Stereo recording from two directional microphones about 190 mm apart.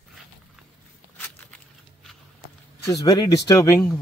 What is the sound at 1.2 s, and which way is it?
Walk, 10° left (ahead or behind).